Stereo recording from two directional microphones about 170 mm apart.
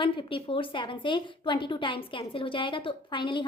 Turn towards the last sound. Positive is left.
turn(degrees=30)  # may be behind; listen again after turning